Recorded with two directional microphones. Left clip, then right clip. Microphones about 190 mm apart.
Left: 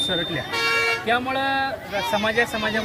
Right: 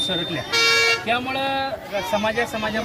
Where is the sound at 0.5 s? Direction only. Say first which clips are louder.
Right 4 dB; 30° left (ahead or behind).